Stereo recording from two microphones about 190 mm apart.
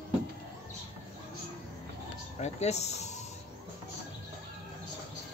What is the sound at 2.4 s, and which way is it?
Speech, 35° left (ahead or behind).